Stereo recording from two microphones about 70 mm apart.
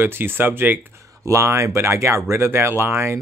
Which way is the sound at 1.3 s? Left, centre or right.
Right.